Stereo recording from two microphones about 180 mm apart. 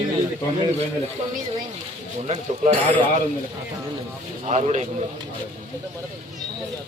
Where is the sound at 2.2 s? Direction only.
40° right (ahead or behind).